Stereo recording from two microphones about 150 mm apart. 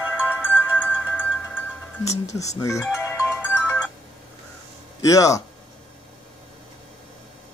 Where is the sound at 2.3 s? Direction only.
20° left (ahead or behind).